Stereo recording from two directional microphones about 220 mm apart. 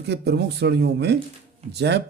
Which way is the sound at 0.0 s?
50° right (ahead or behind).